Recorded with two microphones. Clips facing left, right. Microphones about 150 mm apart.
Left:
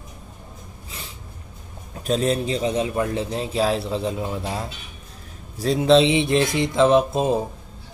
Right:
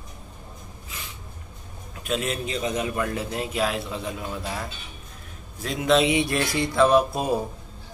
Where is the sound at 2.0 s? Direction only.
35° left (ahead or behind).